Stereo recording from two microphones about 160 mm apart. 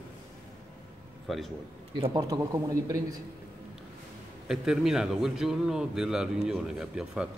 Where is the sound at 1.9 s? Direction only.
25° right (ahead or behind).